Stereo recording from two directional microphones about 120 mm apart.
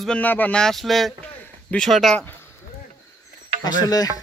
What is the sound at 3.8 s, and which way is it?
Speech, 30° left (ahead or behind).